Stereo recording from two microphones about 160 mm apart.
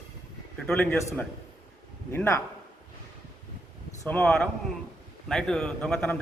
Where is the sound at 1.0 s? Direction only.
20° left (ahead or behind).